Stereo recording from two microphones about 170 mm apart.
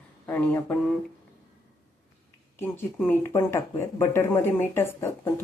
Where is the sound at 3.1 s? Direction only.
15° left (ahead or behind).